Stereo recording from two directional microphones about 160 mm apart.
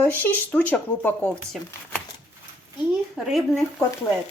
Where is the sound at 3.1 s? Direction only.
Centre (ahead or behind).